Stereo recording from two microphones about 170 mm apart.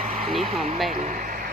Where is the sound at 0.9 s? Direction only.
45° right (ahead or behind).